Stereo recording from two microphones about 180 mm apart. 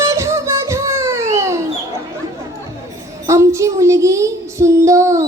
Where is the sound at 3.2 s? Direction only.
15° right (ahead or behind).